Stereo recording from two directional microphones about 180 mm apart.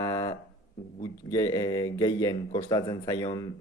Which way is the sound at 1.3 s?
20° left (ahead or behind).